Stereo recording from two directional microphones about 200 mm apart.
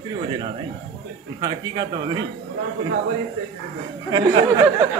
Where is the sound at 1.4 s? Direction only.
20° right (ahead or behind).